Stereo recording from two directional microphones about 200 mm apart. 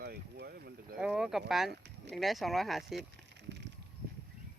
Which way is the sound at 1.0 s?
5° right (ahead or behind).